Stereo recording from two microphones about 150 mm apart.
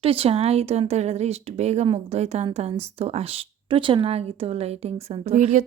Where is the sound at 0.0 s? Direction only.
40° right (ahead or behind).